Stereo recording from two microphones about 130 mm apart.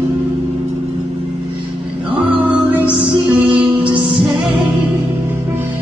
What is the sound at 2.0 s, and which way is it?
Music, 40° right (ahead or behind).